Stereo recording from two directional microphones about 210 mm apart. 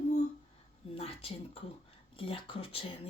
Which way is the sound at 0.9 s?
25° left (ahead or behind).